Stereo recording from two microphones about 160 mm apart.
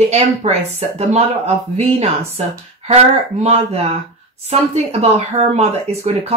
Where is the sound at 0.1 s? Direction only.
40° right (ahead or behind).